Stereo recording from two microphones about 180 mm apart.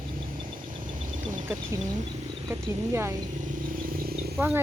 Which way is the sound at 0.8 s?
45° right (ahead or behind).